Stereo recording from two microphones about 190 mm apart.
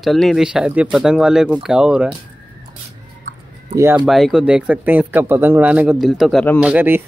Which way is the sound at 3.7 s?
10° right (ahead or behind).